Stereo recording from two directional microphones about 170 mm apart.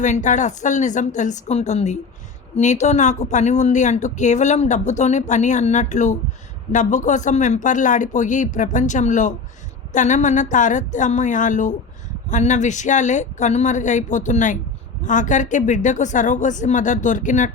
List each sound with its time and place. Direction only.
0.0 s speech: 45° left (ahead or behind)